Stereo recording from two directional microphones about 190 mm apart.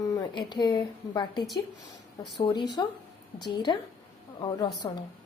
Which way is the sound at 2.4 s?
25° left (ahead or behind).